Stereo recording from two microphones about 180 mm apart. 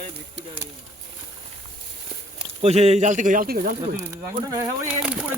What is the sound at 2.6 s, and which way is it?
Speech, 35° right (ahead or behind).